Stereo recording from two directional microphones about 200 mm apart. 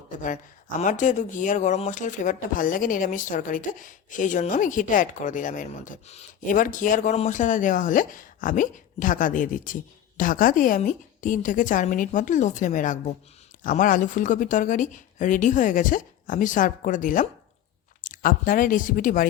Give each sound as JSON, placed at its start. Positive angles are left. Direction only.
{"t": 0.1, "sound": "speech", "side_deg": 40}